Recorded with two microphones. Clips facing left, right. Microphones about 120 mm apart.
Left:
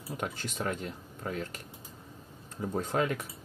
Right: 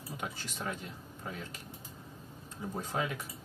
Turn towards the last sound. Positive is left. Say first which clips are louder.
# left 6 dB
turn(degrees=55)  # may be behind; listen again after turning